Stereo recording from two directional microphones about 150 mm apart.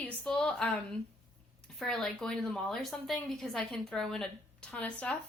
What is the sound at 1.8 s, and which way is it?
A woman's voice, 5° left (ahead or behind).